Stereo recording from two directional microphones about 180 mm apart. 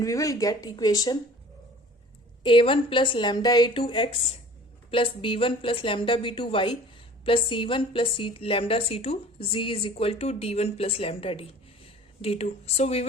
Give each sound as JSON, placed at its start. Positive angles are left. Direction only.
{"t": 0.0, "sound": "a woman's voice", "side_deg": 20}
{"t": 2.4, "sound": "a woman's voice", "side_deg": 30}